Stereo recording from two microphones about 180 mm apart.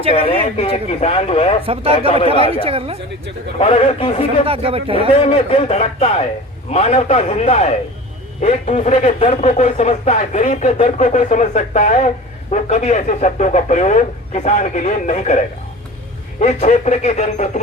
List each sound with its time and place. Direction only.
0.1 s speech: 30° left (ahead or behind)
1.6 s speech: 30° right (ahead or behind)
2.0 s a man's voice: 30° left (ahead or behind)
2.4 s speech: 30° right (ahead or behind)
3.6 s speech: 35° left (ahead or behind)
4.4 s speech: 35° right (ahead or behind)
4.9 s speech: 30° left (ahead or behind)